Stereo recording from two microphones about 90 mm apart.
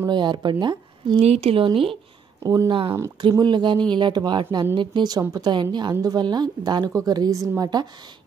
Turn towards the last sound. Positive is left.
turn(degrees=-40)  # may be behind; listen again after turning